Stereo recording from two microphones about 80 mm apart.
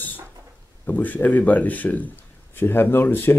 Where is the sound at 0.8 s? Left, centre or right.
Left.